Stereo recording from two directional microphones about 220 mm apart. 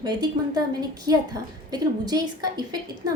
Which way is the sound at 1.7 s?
15° right (ahead or behind).